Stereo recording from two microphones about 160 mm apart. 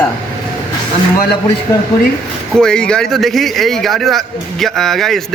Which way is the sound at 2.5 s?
5° left (ahead or behind).